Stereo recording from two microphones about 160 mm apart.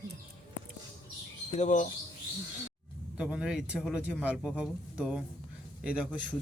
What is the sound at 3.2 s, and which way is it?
Speech, 5° right (ahead or behind).